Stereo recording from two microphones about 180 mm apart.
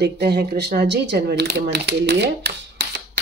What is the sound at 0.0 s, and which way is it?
Speech, 65° right (ahead or behind).